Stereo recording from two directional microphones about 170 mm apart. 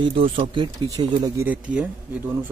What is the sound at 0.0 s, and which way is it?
Speech, 30° right (ahead or behind).